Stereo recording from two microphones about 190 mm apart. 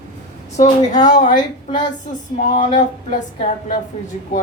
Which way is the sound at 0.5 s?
40° left (ahead or behind).